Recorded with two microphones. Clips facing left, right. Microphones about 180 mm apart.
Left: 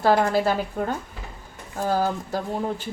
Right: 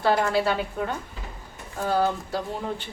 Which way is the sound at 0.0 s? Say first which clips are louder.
Left 3 dB; 40° left (ahead or behind).